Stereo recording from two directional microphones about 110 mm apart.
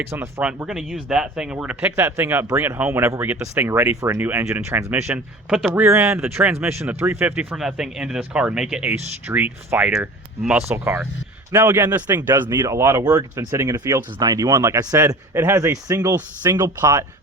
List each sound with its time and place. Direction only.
0.0 s speech: 20° right (ahead or behind)
0.4 s speech: 10° right (ahead or behind)
5.8 s speech: 25° right (ahead or behind)
7.5 s speech: 5° right (ahead or behind); by 17.1 s 30° right (ahead or behind)